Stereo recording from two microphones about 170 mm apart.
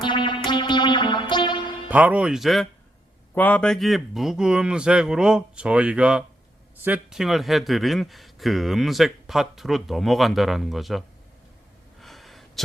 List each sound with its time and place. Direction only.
0.0 s music: 25° left (ahead or behind)
1.9 s speech: 10° right (ahead or behind)
11.9 s a sound: centre (ahead or behind)